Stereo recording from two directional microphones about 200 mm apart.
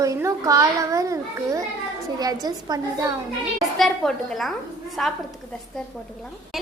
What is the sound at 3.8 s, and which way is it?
Speech, centre (ahead or behind).